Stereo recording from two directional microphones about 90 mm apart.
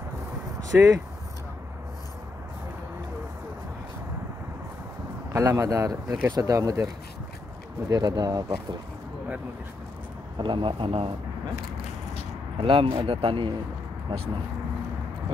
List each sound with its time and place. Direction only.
0.7 s speech: 40° right (ahead or behind)
5.3 s speech: 35° right (ahead or behind)
7.9 s speech: 50° right (ahead or behind)
10.3 s speech: 65° right (ahead or behind); by 11.1 s 90° right
12.5 s speech: 75° right (ahead or behind)